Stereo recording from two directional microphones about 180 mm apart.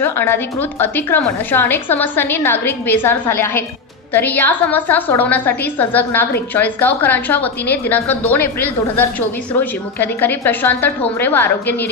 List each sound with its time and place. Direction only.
0.0 s a woman's voice: 10° left (ahead or behind)